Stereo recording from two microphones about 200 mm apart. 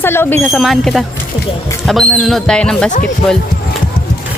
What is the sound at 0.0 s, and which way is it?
Speech, 10° left (ahead or behind).